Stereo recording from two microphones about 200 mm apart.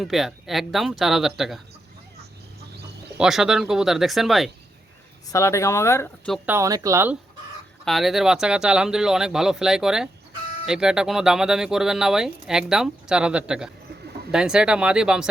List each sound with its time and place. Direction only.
0.0 s speech: centre (ahead or behind)
3.2 s speech: centre (ahead or behind)
5.3 s speech: 15° left (ahead or behind)
6.3 s speech: 10° right (ahead or behind)
7.9 s speech: centre (ahead or behind)